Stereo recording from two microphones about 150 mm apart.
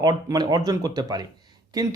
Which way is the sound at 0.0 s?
25° right (ahead or behind).